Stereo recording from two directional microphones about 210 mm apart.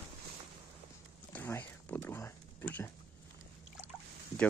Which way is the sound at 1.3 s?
10° left (ahead or behind).